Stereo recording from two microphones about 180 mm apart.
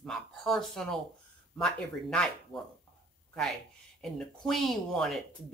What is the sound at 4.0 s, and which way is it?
Speech, centre (ahead or behind).